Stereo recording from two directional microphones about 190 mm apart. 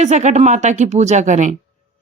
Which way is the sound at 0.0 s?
40° right (ahead or behind).